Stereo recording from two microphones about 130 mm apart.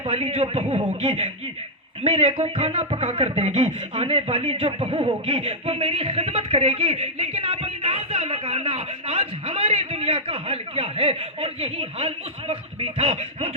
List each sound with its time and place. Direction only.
0.0 s speech: 50° right (ahead or behind)